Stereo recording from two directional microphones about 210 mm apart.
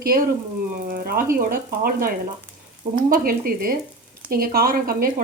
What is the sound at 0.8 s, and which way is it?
Speech, 40° right (ahead or behind).